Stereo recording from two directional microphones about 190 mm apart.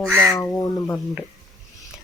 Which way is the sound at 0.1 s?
10° right (ahead or behind).